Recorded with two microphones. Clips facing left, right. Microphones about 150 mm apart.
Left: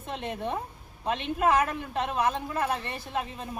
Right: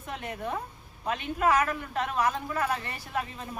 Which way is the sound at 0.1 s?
25° left (ahead or behind).